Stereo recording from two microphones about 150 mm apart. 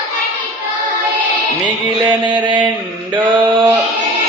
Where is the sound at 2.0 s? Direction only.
30° right (ahead or behind).